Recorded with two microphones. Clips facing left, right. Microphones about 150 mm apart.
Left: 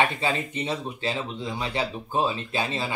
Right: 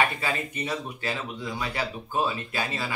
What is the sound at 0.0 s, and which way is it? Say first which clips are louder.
Speech: left 2 dB; 25° left (ahead or behind).